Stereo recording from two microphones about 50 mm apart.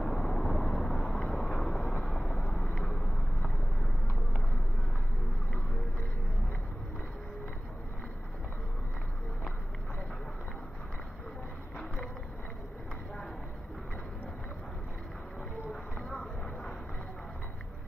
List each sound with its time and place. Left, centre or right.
0.0 s vehicle: centre